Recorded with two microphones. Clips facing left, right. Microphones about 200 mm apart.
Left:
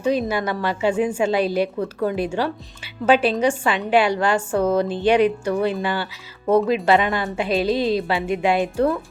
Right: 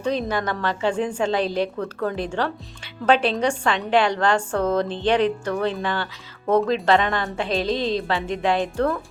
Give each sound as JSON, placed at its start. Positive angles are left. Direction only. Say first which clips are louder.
{"t": 0.0, "sound": "a woman's voice", "louder": "left 3 dB", "side_deg": 10}